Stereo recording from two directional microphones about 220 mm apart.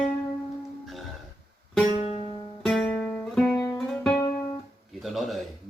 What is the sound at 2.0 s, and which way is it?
Music, 30° left (ahead or behind).